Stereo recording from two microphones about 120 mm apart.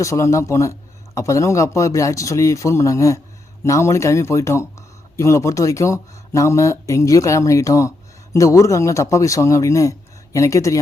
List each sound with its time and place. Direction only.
0.0 s speech: 25° left (ahead or behind)